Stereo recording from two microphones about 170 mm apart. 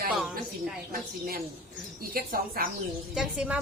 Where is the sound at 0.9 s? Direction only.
60° right (ahead or behind).